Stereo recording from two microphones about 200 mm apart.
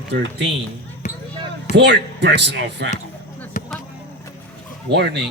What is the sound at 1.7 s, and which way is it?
Speech, 60° right (ahead or behind).